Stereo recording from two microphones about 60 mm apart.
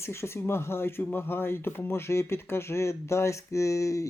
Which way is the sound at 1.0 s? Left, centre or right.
Left.